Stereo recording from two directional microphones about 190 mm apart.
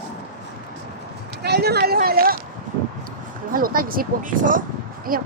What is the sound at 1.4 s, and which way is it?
Speech, 60° right (ahead or behind).